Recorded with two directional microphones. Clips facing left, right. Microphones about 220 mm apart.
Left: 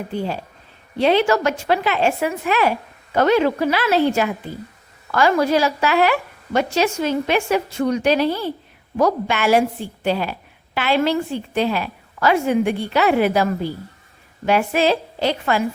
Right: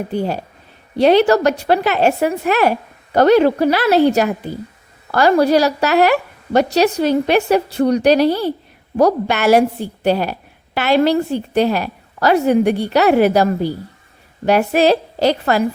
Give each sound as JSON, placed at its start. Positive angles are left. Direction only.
{"t": 0.1, "sound": "a woman's voice", "side_deg": -40}